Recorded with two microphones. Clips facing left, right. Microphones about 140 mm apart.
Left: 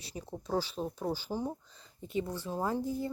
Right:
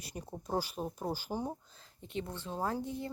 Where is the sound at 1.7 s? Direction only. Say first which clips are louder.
Left 5 dB; centre (ahead or behind).